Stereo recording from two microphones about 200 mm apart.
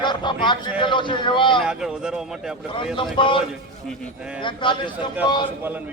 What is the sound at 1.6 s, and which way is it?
Speech, 5° right (ahead or behind).